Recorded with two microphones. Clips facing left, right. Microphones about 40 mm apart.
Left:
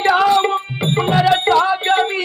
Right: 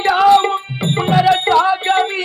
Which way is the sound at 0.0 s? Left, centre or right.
Centre.